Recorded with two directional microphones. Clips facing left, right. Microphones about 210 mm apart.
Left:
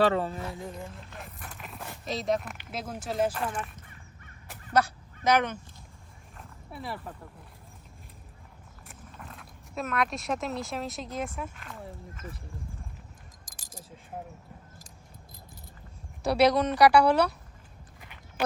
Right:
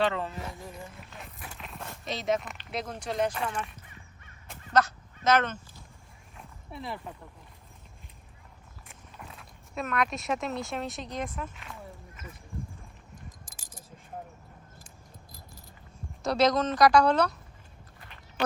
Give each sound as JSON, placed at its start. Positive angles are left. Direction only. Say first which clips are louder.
{"t": 0.0, "sound": "speech", "louder": "left 4 dB", "side_deg": 35}
{"t": 1.1, "sound": "a sound", "louder": "left 1 dB", "side_deg": 0}
{"t": 2.6, "sound": "speech", "louder": "right 1 dB", "side_deg": 5}
{"t": 6.3, "sound": "a sound", "louder": "even", "side_deg": 5}
{"t": 8.9, "sound": "speech", "louder": "left 1 dB", "side_deg": -5}
{"t": 16.2, "sound": "a woman's voice", "louder": "left 2 dB", "side_deg": 10}